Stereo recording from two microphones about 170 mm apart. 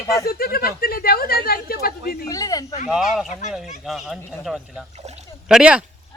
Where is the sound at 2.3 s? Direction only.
20° left (ahead or behind).